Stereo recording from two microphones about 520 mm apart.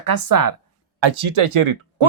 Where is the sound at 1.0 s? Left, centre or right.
Right.